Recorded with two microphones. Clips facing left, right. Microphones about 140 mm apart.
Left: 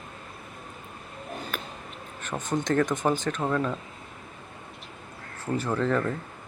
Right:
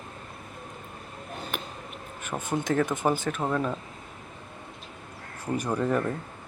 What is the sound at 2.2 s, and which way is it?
Speech, 10° right (ahead or behind).